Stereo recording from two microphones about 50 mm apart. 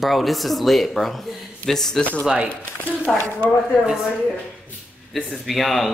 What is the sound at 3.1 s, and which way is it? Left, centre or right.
Speech, centre.